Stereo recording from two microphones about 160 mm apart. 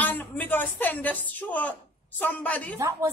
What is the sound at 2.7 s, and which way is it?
Speech, 15° right (ahead or behind).